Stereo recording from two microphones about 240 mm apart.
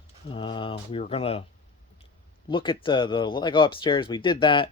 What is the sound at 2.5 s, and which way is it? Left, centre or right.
Speech, left.